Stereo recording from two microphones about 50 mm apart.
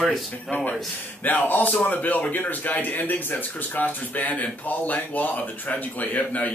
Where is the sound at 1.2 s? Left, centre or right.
Left.